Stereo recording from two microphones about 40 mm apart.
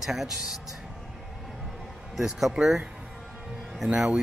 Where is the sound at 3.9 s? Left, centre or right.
Centre.